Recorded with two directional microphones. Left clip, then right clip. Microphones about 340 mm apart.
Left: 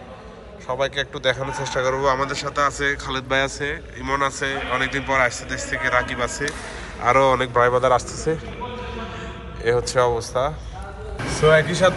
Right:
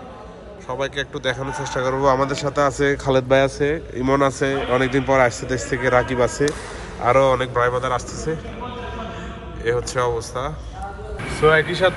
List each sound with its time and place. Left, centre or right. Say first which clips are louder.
0.7 s a man's voice: left 2 dB; centre
9.6 s speech: left 2 dB; centre
11.4 s speech: even; centre